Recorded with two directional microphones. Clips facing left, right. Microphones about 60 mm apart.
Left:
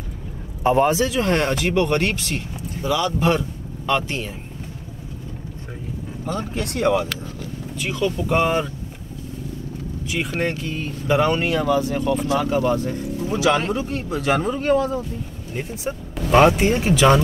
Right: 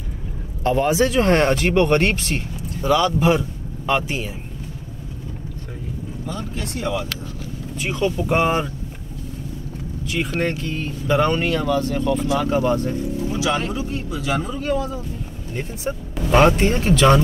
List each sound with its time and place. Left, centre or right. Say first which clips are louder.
0.7 s speech: left 2 dB; centre
1.0 s speech: right 4 dB; right
3.2 s speech: right 2 dB; centre
6.2 s speech: left 4 dB; left
7.8 s speech: right 1 dB; right
8.4 s speech: even; centre
10.2 s speech: right 1 dB; centre
12.3 s speech: even; centre
13.4 s speech: left 5 dB; left
15.5 s speech: right 1 dB; centre